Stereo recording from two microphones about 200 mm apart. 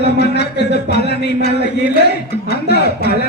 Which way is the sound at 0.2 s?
55° left (ahead or behind).